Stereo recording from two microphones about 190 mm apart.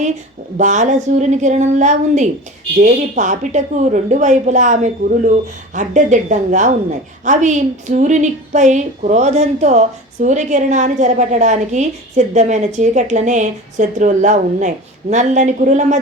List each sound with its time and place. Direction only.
0.5 s a woman's voice: 40° right (ahead or behind)